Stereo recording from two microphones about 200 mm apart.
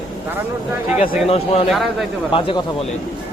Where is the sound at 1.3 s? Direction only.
30° left (ahead or behind).